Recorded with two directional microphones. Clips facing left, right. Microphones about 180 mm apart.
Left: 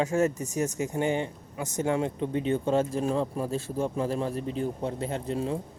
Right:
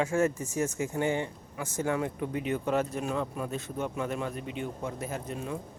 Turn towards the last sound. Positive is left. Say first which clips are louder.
# left 5 dB
turn(degrees=30)  # may be behind; listen again after turning